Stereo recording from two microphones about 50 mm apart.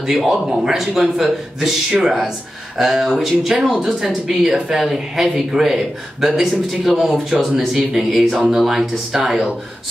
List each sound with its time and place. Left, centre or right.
0.5 s a man's voice: centre